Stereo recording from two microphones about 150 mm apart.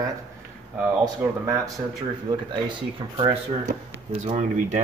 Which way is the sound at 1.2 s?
10° right (ahead or behind).